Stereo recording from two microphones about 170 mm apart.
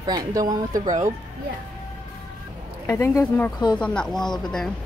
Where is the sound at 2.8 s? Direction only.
15° left (ahead or behind).